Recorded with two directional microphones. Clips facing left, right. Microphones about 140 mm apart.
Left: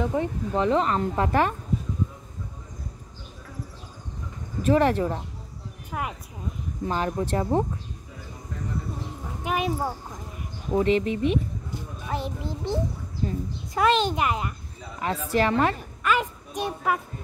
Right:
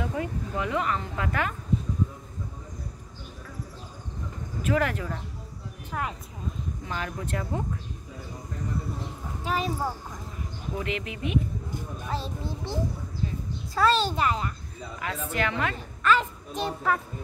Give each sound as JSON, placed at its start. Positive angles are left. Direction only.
{"t": 0.0, "sound": "speech", "side_deg": 30}
{"t": 4.6, "sound": "speech", "side_deg": 30}
{"t": 5.9, "sound": "speech", "side_deg": 10}
{"t": 6.9, "sound": "speech", "side_deg": 30}
{"t": 9.4, "sound": "a child's voice", "side_deg": 15}
{"t": 10.7, "sound": "speech", "side_deg": 30}
{"t": 12.1, "sound": "a child's voice", "side_deg": 15}
{"t": 13.2, "sound": "a child's voice", "side_deg": 45}
{"t": 13.7, "sound": "a child's voice", "side_deg": 20}
{"t": 15.0, "sound": "speech", "side_deg": 35}
{"t": 16.0, "sound": "a woman's voice", "side_deg": 10}